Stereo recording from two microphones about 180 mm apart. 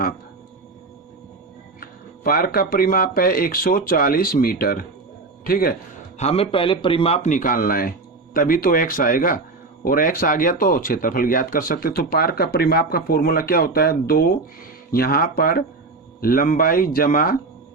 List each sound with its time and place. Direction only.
1.8 s speech: 55° left (ahead or behind)
6.1 s speech: 35° left (ahead or behind); by 17.3 s 50° left (ahead or behind)